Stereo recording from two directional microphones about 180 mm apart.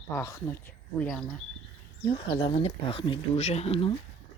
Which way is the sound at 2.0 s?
25° left (ahead or behind).